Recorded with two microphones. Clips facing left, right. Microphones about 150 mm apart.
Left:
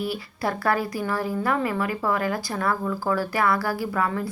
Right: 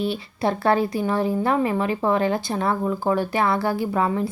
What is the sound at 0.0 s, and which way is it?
Speech, 25° right (ahead or behind).